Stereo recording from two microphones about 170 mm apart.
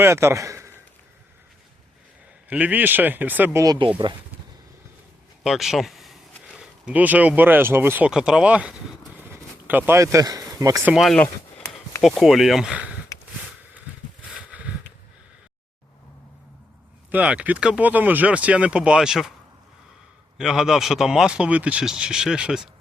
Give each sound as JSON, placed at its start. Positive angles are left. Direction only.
{"t": 0.0, "sound": "speech", "side_deg": -15}
{"t": 2.5, "sound": "speech", "side_deg": -10}
{"t": 5.4, "sound": "speech", "side_deg": 0}
{"t": 10.9, "sound": "speech", "side_deg": 0}
{"t": 14.3, "sound": "a sound", "side_deg": -5}
{"t": 17.1, "sound": "speech", "side_deg": -10}
{"t": 20.4, "sound": "speech", "side_deg": -5}